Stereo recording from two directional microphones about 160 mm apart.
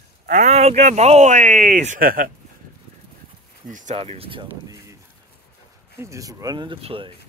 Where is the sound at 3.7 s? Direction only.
50° right (ahead or behind).